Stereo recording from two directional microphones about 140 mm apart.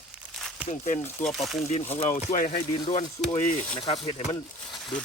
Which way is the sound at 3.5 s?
65° left (ahead or behind).